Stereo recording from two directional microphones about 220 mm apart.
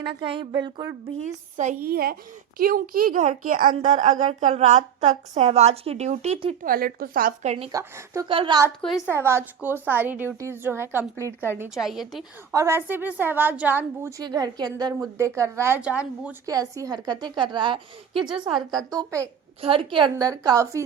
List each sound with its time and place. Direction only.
0.0 s a woman's voice: 25° right (ahead or behind)
1.5 s a woman's voice: 40° right (ahead or behind)
6.7 s speech: 40° right (ahead or behind)
7.7 s a woman's voice: 15° right (ahead or behind)
9.0 s a woman's voice: 10° right (ahead or behind)
12.5 s a woman's voice: 10° right (ahead or behind)